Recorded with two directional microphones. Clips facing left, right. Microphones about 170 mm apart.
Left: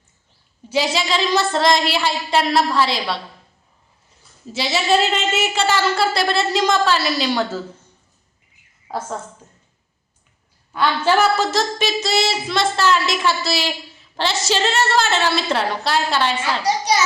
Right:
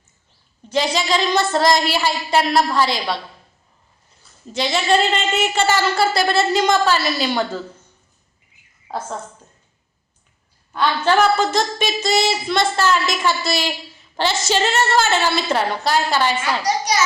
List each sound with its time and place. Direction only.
0.7 s a woman's voice: 5° left (ahead or behind)
4.5 s a woman's voice: 5° left (ahead or behind)
10.8 s a woman's voice: 5° left (ahead or behind)
16.4 s a child's voice: 30° left (ahead or behind)